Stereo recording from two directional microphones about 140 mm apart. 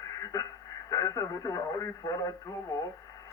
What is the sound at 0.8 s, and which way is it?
Speech, 25° left (ahead or behind).